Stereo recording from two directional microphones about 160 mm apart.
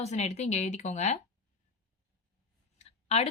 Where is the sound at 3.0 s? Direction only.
40° left (ahead or behind).